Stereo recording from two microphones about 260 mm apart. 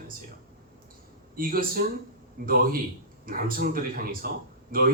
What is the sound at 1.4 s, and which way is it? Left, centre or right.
Speech, right.